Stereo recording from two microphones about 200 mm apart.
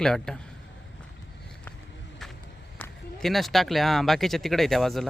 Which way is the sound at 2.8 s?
Centre (ahead or behind).